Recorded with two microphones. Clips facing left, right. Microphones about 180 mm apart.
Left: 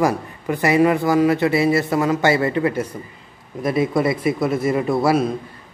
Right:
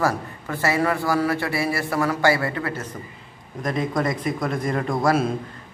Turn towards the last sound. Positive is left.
turn(degrees=0)  # may be behind; listen again after turning